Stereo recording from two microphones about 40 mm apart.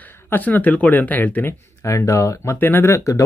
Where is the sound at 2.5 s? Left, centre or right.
Left.